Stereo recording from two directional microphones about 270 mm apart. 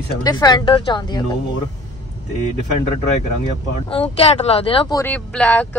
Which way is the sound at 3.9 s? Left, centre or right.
Left.